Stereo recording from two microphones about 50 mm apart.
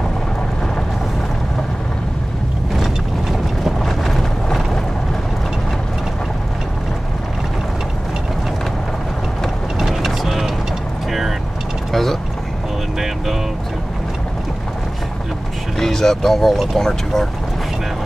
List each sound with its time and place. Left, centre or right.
2.7 s mechanisms: centre
9.8 s vehicle: centre
15.8 s speech: centre